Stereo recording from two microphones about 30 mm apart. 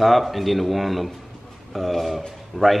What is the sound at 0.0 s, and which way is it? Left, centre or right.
A man's voice, centre.